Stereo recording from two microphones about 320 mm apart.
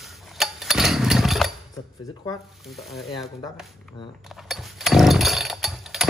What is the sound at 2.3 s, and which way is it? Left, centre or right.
Speech, centre.